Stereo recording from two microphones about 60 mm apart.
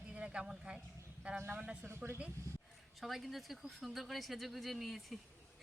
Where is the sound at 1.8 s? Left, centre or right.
Right.